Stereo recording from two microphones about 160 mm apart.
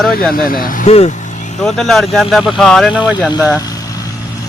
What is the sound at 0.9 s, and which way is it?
Vehicle, 45° left (ahead or behind).